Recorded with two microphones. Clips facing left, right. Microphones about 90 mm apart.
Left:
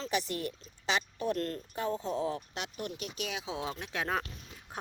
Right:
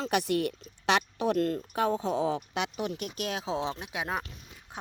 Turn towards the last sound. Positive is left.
turn(degrees=5)  # may be behind; listen again after turning